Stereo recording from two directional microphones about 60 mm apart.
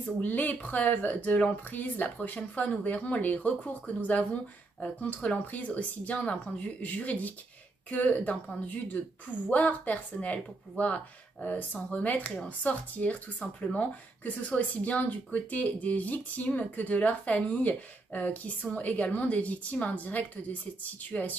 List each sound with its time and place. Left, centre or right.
0.2 s speech: left